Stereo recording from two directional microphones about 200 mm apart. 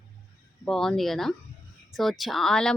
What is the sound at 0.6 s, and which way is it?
Speech, 5° left (ahead or behind).